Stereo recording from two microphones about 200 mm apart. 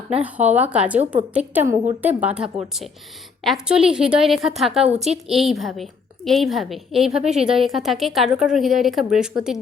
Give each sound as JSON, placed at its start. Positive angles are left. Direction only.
{"t": 0.2, "sound": "a woman's voice", "side_deg": -5}
{"t": 4.9, "sound": "a woman's voice", "side_deg": -35}
{"t": 5.3, "sound": "a woman's voice", "side_deg": 0}